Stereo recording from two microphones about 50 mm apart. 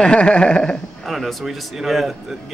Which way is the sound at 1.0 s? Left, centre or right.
Centre.